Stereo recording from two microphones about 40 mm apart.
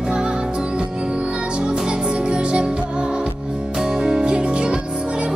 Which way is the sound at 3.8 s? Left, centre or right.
Centre.